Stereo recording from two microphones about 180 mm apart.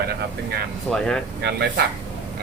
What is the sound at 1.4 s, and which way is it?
Speech, 65° right (ahead or behind).